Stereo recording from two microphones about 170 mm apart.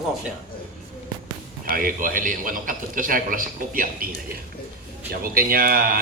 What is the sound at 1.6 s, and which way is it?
Speech, 55° right (ahead or behind).